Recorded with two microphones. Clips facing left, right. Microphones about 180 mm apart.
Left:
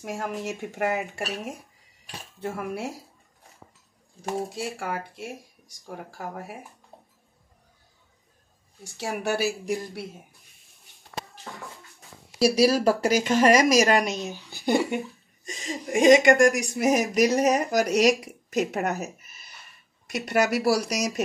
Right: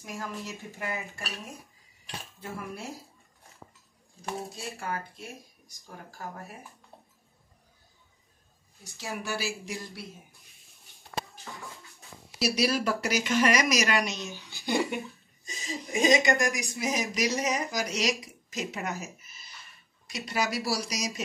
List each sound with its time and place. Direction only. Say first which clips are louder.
0.0 s speech: left 7 dB; 75° left (ahead or behind)
4.6 s speech: left 5 dB; 80° left
8.8 s speech: left 7 dB; 75° left (ahead or behind)
12.5 s speech: left 6 dB; 40° left (ahead or behind)
14.2 s speech: left 7 dB; 55° left (ahead or behind)
15.4 s speech: left 4 dB; 75° left (ahead or behind)